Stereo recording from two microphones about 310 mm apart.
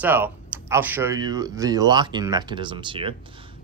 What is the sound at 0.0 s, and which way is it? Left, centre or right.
Speech, centre.